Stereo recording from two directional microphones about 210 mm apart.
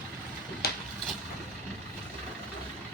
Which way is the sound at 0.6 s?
50° left (ahead or behind).